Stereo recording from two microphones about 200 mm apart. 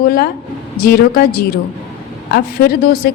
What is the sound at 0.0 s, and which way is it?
A woman's voice, 45° left (ahead or behind).